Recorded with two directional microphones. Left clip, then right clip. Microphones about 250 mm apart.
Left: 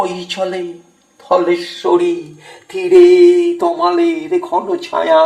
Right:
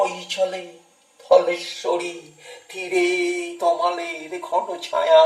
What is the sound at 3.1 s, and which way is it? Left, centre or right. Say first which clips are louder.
Speech: left 15 dB; left.